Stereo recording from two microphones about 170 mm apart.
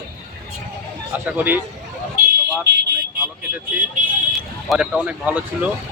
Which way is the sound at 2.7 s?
90° right.